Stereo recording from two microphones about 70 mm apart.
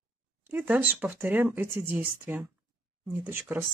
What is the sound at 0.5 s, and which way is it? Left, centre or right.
Speech, right.